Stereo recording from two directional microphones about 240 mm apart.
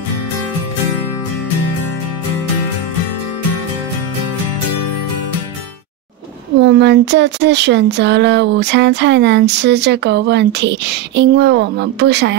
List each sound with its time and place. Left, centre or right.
6.6 s speech: right